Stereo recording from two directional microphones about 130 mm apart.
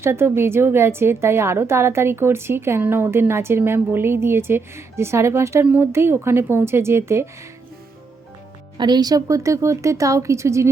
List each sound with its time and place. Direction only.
0.0 s a woman's voice: 20° right (ahead or behind)
8.8 s a woman's voice: 30° right (ahead or behind)